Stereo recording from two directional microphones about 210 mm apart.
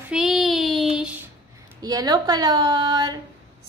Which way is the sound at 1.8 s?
20° right (ahead or behind).